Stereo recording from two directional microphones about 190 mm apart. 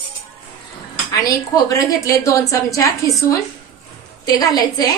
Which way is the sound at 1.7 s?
15° left (ahead or behind).